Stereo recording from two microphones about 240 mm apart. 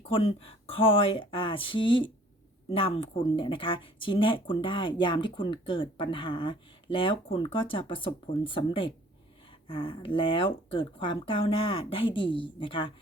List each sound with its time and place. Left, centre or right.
0.0 s speech: left